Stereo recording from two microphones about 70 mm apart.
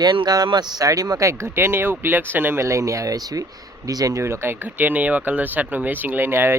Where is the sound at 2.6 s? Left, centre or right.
Right.